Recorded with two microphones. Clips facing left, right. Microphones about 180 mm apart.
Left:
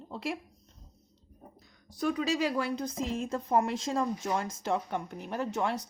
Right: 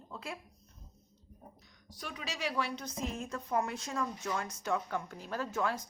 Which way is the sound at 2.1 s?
40° left (ahead or behind).